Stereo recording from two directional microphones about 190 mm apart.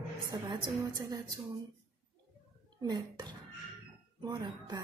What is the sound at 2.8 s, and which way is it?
Speech, 25° right (ahead or behind).